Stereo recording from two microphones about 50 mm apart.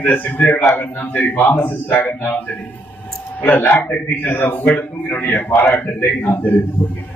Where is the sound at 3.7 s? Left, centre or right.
Left.